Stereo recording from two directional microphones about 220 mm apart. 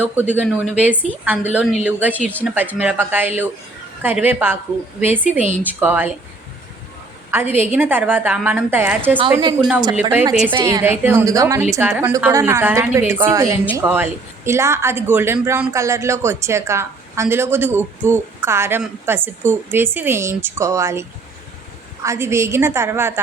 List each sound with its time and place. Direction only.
0.0 s a woman's voice: 10° right (ahead or behind)
7.3 s a woman's voice: 10° right (ahead or behind)
9.3 s a woman's voice: 20° right (ahead or behind)
10.0 s a woman's voice: 10° right (ahead or behind)
22.0 s a woman's voice: 15° right (ahead or behind)